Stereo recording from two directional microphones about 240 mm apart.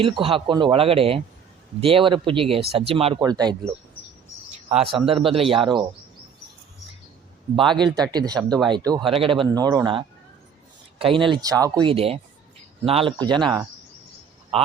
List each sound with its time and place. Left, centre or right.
0.0 s speech: right
4.8 s speech: right
7.5 s speech: right